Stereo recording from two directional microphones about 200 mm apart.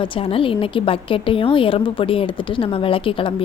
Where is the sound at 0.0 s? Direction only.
25° left (ahead or behind).